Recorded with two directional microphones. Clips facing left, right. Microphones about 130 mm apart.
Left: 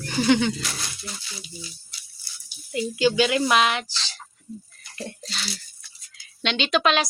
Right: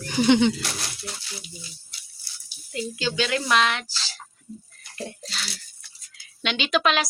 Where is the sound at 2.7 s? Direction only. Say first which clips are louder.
Left 6 dB; 10° left (ahead or behind).